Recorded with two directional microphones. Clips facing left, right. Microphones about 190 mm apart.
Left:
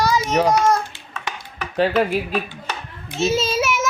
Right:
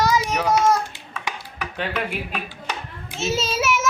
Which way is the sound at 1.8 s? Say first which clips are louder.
Left 9 dB; 35° left (ahead or behind).